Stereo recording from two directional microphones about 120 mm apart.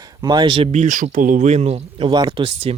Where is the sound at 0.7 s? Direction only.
85° right; by 2.1 s 65° right (ahead or behind).